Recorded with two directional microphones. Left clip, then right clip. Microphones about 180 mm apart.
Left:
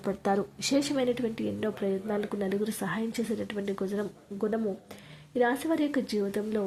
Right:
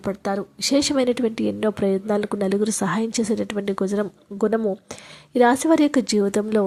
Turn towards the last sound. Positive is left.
turn(degrees=-40)  # may be behind; listen again after turning